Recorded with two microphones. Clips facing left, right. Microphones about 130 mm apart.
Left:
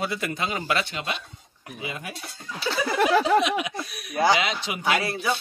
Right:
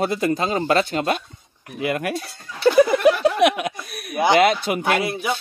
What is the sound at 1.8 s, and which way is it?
Speech, 65° right (ahead or behind).